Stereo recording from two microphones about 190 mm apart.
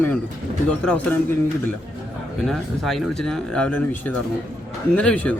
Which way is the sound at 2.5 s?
Centre (ahead or behind).